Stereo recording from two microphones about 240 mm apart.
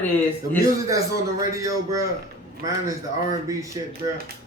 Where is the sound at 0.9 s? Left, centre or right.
Centre.